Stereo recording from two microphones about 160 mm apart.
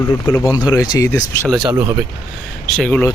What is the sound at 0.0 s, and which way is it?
Speech, 20° left (ahead or behind).